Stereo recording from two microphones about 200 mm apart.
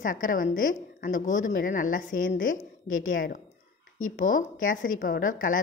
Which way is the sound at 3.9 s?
80° left.